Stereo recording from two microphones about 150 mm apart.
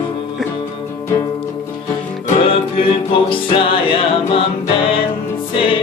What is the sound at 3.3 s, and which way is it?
Music, 35° left (ahead or behind).